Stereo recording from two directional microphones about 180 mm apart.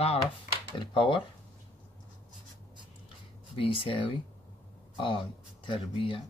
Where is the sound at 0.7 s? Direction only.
30° left (ahead or behind).